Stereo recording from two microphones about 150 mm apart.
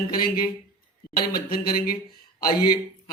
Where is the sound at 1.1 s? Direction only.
80° left.